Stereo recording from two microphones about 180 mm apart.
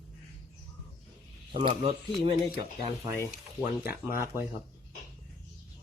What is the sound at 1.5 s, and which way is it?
Speech, 35° right (ahead or behind).